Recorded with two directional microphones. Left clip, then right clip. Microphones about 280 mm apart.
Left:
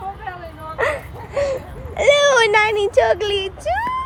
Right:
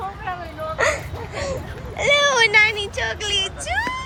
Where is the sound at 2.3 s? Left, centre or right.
Centre.